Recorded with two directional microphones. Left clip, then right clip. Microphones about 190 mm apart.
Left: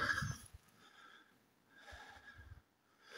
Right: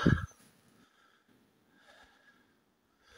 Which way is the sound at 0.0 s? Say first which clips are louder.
Right 5 dB; 10° right (ahead or behind).